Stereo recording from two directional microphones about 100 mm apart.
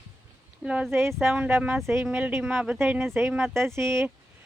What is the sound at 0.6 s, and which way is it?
Speech, 10° right (ahead or behind).